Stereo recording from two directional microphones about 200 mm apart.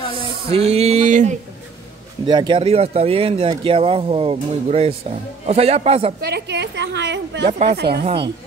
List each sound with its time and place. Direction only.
0.5 s a sound: 30° right (ahead or behind)
2.2 s speech: 25° right (ahead or behind)
6.2 s a woman's voice: 55° right (ahead or behind)
7.4 s speech: 30° right (ahead or behind)
7.7 s a woman's voice: 55° right (ahead or behind)